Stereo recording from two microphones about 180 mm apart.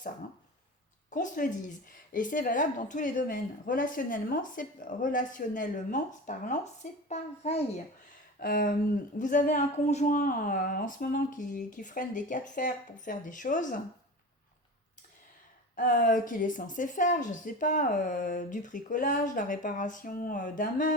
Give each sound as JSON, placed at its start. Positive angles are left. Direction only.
{"t": 1.1, "sound": "a child's voice", "side_deg": 45}
{"t": 8.4, "sound": "speech", "side_deg": 50}
{"t": 15.7, "sound": "speech", "side_deg": 50}